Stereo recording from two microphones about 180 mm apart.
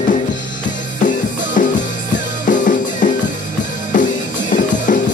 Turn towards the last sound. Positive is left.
turn(degrees=45)  # may be behind; listen again after turning